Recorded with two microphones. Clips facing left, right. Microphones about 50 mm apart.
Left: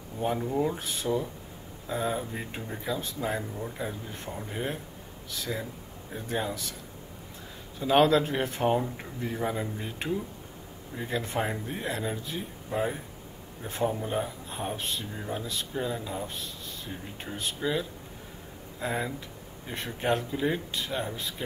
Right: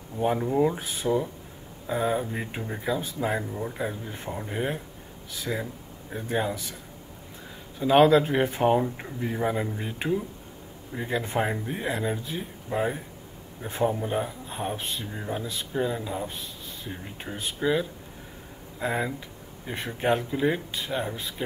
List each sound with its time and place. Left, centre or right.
0.2 s speech: centre
7.8 s speech: centre